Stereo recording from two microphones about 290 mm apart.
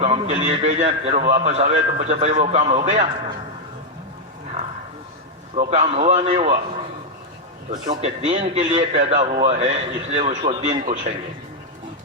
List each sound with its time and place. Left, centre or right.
0.0 s a man's voice: right
5.5 s a man's voice: right
7.7 s a man's voice: right